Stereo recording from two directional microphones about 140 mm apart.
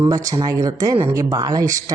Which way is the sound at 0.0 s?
25° right (ahead or behind).